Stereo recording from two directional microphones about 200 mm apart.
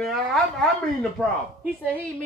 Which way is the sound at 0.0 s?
Centre (ahead or behind).